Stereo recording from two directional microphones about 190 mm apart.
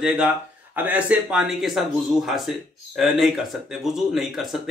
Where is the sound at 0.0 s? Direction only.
5° right (ahead or behind).